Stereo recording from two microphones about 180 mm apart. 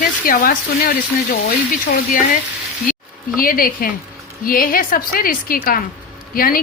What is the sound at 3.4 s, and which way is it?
A woman's voice, 55° left (ahead or behind).